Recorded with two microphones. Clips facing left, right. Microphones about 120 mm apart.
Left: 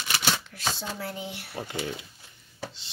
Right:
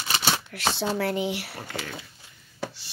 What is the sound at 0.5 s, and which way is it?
Speech, 75° right (ahead or behind).